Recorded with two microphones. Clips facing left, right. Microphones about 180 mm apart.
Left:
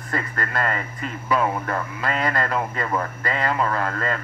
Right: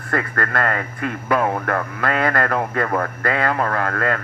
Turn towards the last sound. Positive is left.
turn(degrees=-60)  # may be behind; listen again after turning